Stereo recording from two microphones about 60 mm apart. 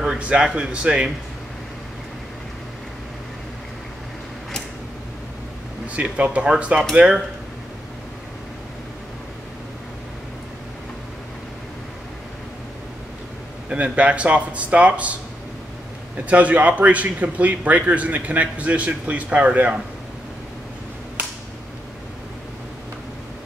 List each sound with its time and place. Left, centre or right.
0.0 s speech: centre
5.9 s a man's voice: right
13.7 s a man's voice: right
16.3 s a man's voice: right